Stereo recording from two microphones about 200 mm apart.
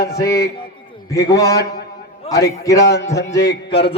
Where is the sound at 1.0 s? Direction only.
15° left (ahead or behind).